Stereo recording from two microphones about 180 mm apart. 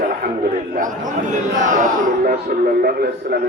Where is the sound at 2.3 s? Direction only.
55° right (ahead or behind).